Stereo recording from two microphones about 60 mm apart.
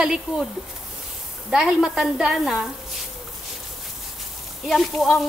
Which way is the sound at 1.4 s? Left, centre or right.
Centre.